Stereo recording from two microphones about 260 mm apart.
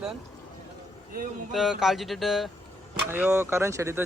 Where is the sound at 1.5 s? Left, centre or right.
Centre.